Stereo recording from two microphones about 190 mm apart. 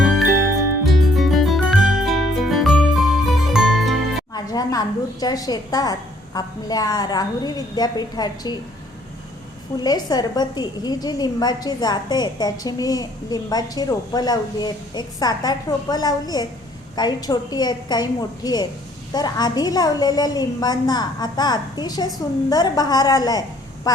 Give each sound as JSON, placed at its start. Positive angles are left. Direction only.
{"t": 1.1, "sound": "music", "side_deg": 0}
{"t": 4.4, "sound": "a woman's voice", "side_deg": 20}
{"t": 9.7, "sound": "a woman's voice", "side_deg": 20}